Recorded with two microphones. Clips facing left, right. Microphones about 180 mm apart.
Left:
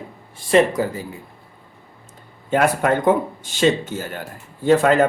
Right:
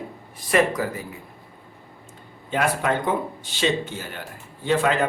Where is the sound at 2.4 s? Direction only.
50° left (ahead or behind).